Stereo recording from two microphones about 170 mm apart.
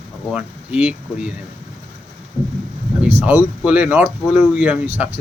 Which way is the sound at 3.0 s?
10° right (ahead or behind).